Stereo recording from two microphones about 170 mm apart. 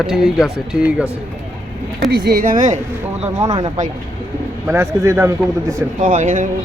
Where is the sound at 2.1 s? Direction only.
70° right (ahead or behind); by 2.8 s 50° right (ahead or behind).